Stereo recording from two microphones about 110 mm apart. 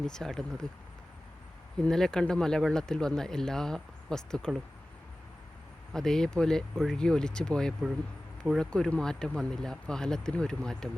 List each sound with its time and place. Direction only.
0.0 s speech: 5° left (ahead or behind)
1.8 s speech: 5° left (ahead or behind)
5.9 s speech: 5° left (ahead or behind)